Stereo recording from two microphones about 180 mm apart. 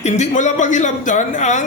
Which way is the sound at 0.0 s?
40° left (ahead or behind).